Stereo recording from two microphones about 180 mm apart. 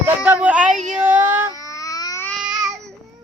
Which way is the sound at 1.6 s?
20° left (ahead or behind).